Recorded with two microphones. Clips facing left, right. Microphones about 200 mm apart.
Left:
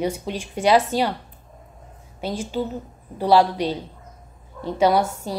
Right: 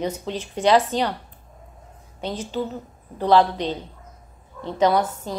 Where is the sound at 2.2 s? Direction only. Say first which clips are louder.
Left 1 dB; 10° left (ahead or behind).